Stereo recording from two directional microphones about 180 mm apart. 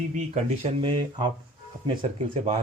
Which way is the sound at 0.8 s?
25° right (ahead or behind).